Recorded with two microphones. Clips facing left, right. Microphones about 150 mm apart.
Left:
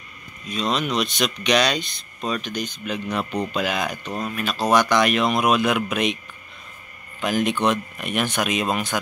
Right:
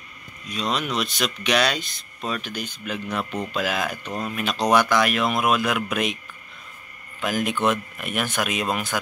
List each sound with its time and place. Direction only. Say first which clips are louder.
0.5 s speech: left 2 dB; 10° right (ahead or behind)
4.4 s speech: even; 20° right (ahead or behind)
4.7 s speech: left 2 dB; 5° right (ahead or behind)
7.2 s speech: left 2 dB; 5° right (ahead or behind)